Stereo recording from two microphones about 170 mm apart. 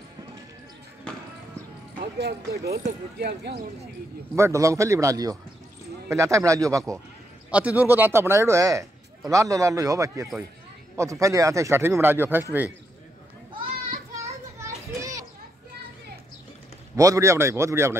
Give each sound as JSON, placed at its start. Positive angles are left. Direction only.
{"t": 2.1, "sound": "speech", "side_deg": -75}
{"t": 4.4, "sound": "a man's voice", "side_deg": -15}
{"t": 7.5, "sound": "a man's voice", "side_deg": -10}
{"t": 15.0, "sound": "children playing", "side_deg": -20}
{"t": 16.9, "sound": "a man's voice", "side_deg": -20}